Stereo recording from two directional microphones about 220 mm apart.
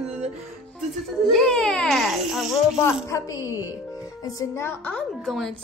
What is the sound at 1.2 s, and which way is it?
Speech, centre (ahead or behind).